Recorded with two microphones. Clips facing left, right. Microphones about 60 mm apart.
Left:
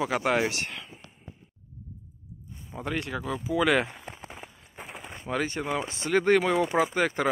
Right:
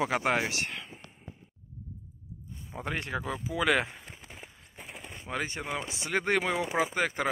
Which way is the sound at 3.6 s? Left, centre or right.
Centre.